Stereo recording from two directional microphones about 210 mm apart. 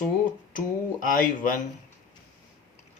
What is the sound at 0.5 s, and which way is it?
Speech, 40° left (ahead or behind).